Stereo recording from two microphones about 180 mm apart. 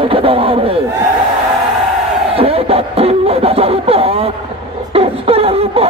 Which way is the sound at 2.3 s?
35° right (ahead or behind).